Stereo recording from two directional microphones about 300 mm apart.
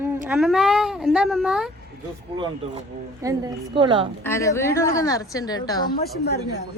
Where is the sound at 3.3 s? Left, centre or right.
Centre.